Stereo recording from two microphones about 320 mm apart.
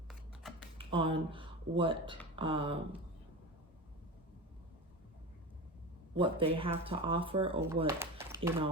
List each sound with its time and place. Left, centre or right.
0.1 s computer keyboard: centre
0.8 s speech: centre
6.1 s speech: centre